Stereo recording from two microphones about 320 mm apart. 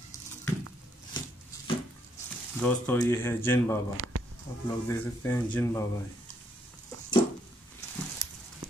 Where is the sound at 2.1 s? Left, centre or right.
Centre.